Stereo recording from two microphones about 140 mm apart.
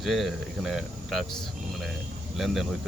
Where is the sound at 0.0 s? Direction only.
Centre (ahead or behind).